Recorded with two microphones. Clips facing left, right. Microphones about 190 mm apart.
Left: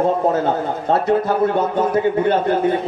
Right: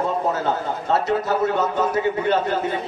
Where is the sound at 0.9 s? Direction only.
55° left (ahead or behind).